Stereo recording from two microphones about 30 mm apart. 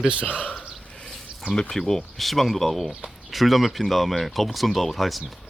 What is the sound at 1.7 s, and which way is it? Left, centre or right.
Speech, centre.